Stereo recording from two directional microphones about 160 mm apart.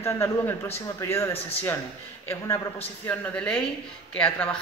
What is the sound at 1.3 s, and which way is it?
Speech, 40° left (ahead or behind).